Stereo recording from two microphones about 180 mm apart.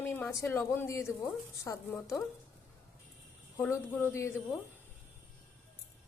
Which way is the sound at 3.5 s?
10° left (ahead or behind).